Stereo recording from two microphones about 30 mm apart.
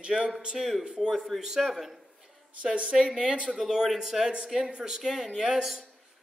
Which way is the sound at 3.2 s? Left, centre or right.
Right.